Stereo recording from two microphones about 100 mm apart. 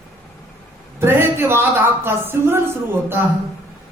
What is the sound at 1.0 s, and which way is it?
Speech, 25° right (ahead or behind).